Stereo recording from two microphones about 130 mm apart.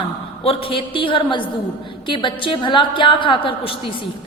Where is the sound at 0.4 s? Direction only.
40° left (ahead or behind).